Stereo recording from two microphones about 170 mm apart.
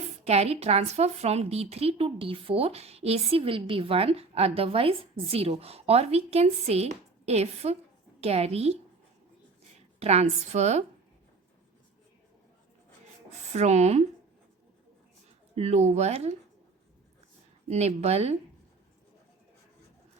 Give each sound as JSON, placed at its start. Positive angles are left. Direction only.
{"t": 0.3, "sound": "speech", "side_deg": -40}
{"t": 10.0, "sound": "speech", "side_deg": -40}
{"t": 13.5, "sound": "speech", "side_deg": -40}
{"t": 15.5, "sound": "speech", "side_deg": -40}
{"t": 17.7, "sound": "speech", "side_deg": -40}